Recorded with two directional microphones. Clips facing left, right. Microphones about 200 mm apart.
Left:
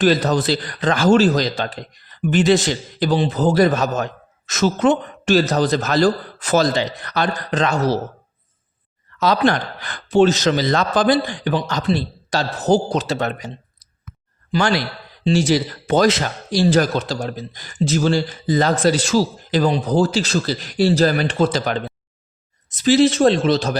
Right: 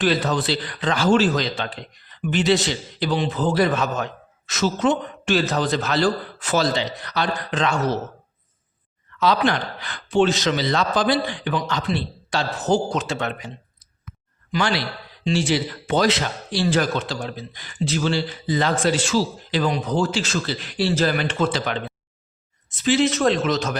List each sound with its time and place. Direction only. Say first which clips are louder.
0.0 s speech: left 5 dB; 40° left (ahead or behind)
9.1 s a man's voice: left 3 dB; 45° left (ahead or behind)
15.2 s a man's voice: left 4 dB; 40° left (ahead or behind)